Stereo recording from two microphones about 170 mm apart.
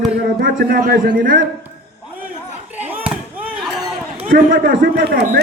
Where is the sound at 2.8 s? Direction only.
10° right (ahead or behind).